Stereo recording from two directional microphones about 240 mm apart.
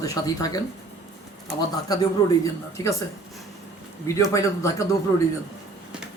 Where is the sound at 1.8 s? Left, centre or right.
Centre.